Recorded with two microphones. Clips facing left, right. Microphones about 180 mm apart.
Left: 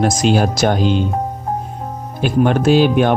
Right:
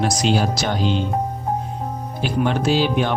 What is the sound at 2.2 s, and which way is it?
Speech, 50° left (ahead or behind).